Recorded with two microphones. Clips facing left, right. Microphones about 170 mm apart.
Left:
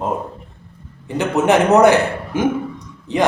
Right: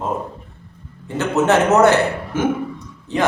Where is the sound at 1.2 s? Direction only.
15° left (ahead or behind).